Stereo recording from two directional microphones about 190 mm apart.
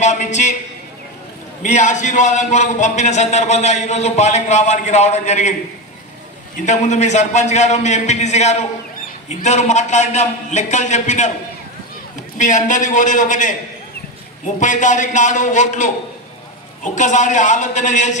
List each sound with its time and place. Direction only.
0.0 s a man's voice: 40° left (ahead or behind)
1.6 s a man's voice: 40° left (ahead or behind)
6.6 s a man's voice: 40° left (ahead or behind)
12.4 s a man's voice: 40° left (ahead or behind)